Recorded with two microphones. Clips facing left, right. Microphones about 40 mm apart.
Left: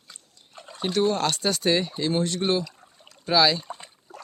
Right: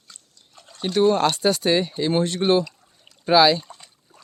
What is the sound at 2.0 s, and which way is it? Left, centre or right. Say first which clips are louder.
Speech: right 5 dB; right.